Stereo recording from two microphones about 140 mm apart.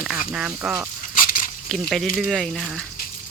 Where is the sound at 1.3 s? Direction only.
75° left (ahead or behind).